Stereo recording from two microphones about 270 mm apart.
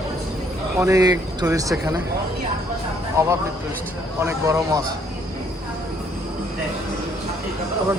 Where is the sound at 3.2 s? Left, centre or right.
Centre.